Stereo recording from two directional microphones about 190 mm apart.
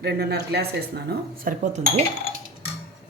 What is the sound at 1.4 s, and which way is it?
Speech, 40° right (ahead or behind).